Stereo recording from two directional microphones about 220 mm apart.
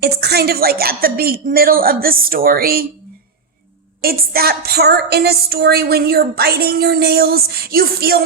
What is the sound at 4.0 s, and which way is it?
A woman's voice, 45° right (ahead or behind).